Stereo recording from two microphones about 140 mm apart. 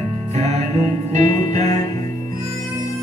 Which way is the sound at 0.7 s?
55° right (ahead or behind).